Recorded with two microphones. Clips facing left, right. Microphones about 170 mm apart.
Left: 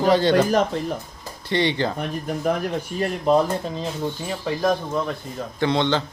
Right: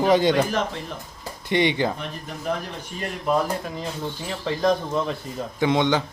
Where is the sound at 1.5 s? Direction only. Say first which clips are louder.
Right 1 dB; 15° right (ahead or behind).